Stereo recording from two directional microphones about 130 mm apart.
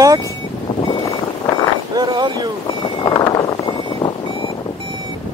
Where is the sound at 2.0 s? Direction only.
30° right (ahead or behind).